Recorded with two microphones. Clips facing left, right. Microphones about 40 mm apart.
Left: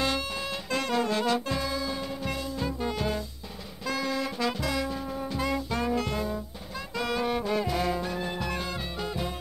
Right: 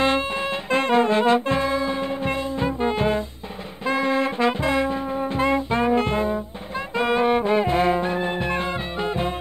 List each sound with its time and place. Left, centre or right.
0.7 s music: right
3.8 s brass instrument: right
7.0 s music: right